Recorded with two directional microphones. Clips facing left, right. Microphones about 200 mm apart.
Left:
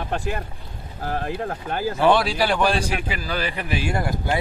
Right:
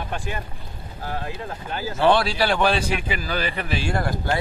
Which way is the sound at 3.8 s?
15° left (ahead or behind).